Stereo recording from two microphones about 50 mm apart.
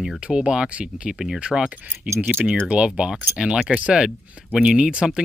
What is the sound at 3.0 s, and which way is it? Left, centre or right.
Speech, centre.